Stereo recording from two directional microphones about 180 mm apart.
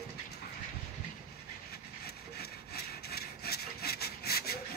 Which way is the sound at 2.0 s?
60° left (ahead or behind).